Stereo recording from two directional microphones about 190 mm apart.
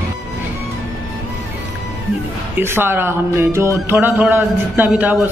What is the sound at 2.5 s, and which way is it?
Speech, 10° right (ahead or behind).